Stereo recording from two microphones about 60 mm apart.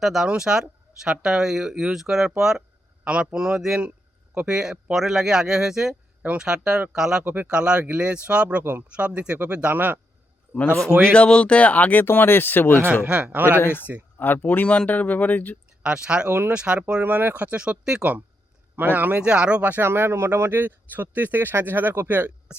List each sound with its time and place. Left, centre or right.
0.0 s speech: centre
3.0 s speech: right
11.1 s speech: centre
12.0 s speech: left
12.9 s speech: right
13.6 s speech: left
15.8 s speech: centre
17.0 s speech: right; by 18.0 s centre
18.8 s speech: right
19.8 s speech: right
20.5 s speech: right